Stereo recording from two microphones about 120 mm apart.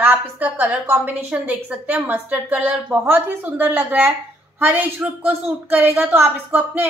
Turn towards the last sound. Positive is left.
turn(degrees=-15)  # may be behind; listen again after turning